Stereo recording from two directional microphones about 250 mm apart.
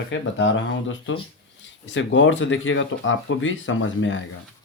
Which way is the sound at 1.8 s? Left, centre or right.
Left.